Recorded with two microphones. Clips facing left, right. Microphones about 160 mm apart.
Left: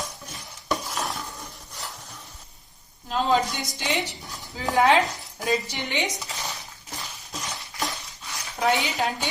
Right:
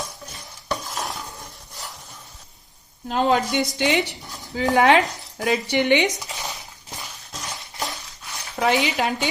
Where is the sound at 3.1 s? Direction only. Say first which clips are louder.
Right 3 dB; 65° right (ahead or behind).